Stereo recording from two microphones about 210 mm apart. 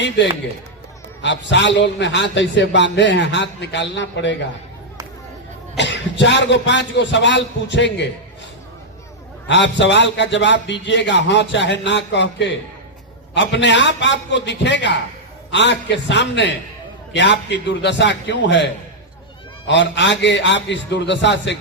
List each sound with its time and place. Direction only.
0.2 s a man's voice: 60° left (ahead or behind)
5.7 s a man's voice: 60° left (ahead or behind)
9.5 s a man's voice: 55° left (ahead or behind)